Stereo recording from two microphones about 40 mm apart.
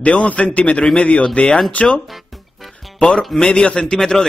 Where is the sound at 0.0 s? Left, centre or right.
Left.